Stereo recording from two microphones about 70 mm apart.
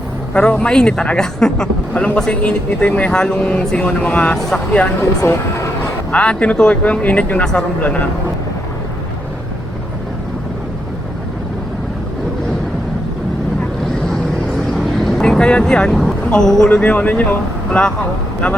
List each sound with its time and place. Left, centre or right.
0.3 s speech: centre
5.2 s speech: left
6.1 s speech: centre
14.7 s vehicle: centre
16.3 s speech: centre